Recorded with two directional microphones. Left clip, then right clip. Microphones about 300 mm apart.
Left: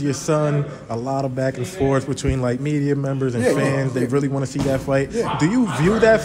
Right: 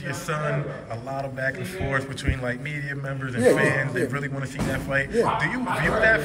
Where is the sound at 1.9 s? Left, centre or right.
Left.